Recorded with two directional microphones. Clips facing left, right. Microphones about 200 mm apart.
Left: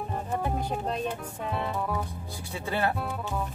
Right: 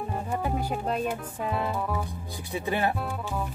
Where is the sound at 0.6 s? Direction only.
5° right (ahead or behind).